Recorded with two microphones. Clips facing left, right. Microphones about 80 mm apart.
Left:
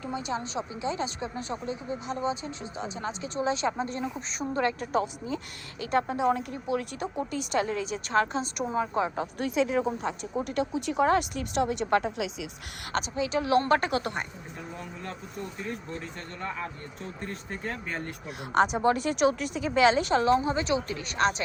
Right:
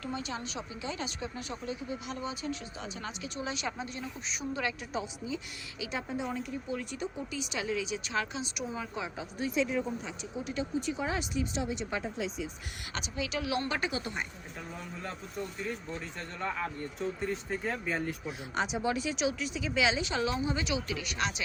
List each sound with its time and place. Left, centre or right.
0.0 s a woman's voice: left
9.4 s speech: left
13.1 s a woman's voice: left
15.0 s speech: centre
17.0 s speech: centre
18.3 s a woman's voice: left